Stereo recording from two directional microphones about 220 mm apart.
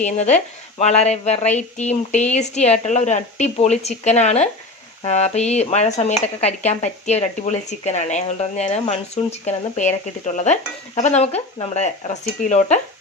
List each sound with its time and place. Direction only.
0.0 s speech: 30° left (ahead or behind)